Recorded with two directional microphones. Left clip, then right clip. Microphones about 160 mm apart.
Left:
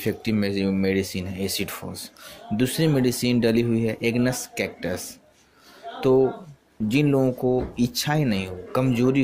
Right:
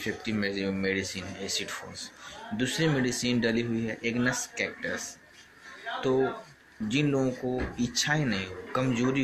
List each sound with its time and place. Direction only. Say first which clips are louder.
0.0 s speech: left 5 dB; 50° left (ahead or behind)